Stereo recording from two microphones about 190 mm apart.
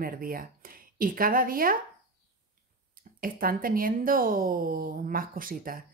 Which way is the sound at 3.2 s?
50° right (ahead or behind).